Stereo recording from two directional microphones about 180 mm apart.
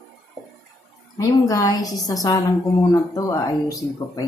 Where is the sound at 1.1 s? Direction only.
20° left (ahead or behind).